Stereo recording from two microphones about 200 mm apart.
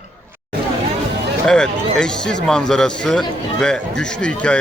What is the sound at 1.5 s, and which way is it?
Speech, 5° left (ahead or behind).